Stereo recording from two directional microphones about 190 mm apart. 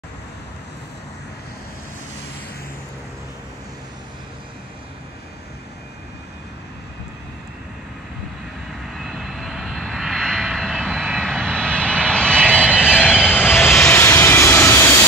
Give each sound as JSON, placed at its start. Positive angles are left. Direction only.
{"t": 8.9, "sound": "vehicle", "side_deg": 0}
{"t": 13.1, "sound": "vehicle", "side_deg": 5}